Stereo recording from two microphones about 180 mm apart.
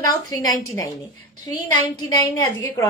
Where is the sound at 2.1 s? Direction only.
15° left (ahead or behind).